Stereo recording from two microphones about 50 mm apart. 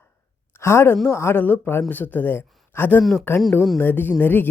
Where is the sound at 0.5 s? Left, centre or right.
Left.